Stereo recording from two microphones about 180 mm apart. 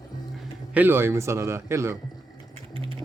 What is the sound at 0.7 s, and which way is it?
A man's voice, 10° right (ahead or behind).